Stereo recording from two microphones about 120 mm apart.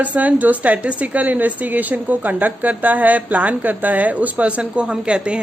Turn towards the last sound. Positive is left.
turn(degrees=-10)  # may be behind; listen again after turning